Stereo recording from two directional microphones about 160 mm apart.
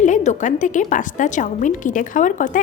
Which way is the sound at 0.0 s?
50° left (ahead or behind).